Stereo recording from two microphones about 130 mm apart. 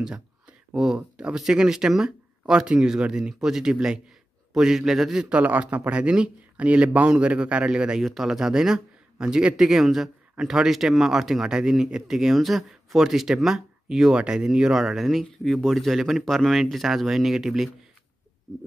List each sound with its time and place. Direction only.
0.7 s a man's voice: 5° right (ahead or behind)